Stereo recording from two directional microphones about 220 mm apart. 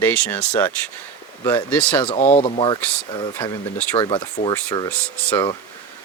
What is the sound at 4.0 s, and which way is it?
Speech, 25° left (ahead or behind).